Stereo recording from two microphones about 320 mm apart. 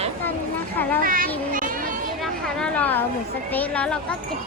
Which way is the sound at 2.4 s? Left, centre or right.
Centre.